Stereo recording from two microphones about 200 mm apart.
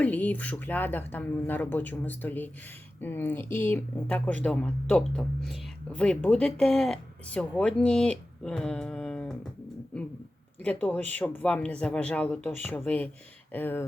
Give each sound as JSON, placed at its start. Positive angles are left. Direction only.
{"t": 0.0, "sound": "speech", "side_deg": 5}
{"t": 10.6, "sound": "speech", "side_deg": 10}